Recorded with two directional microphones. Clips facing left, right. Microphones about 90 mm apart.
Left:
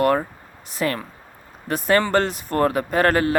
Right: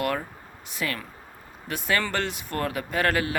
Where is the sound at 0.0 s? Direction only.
40° left (ahead or behind).